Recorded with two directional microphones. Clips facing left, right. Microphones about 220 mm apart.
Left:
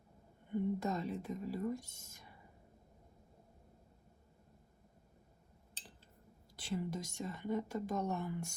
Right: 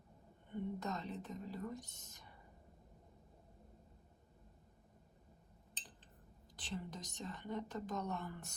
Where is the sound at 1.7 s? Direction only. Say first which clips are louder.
Left 7 dB; 20° right (ahead or behind).